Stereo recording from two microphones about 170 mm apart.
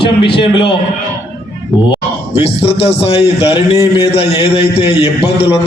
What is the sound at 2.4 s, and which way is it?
A man's voice, 35° left (ahead or behind).